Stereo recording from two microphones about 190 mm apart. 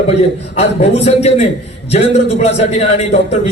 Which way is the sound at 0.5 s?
35° left (ahead or behind).